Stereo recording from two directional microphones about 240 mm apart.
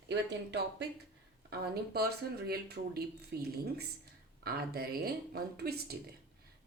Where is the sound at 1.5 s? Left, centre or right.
Right.